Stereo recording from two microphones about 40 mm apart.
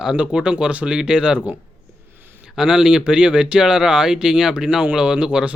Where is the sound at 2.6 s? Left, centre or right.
Centre.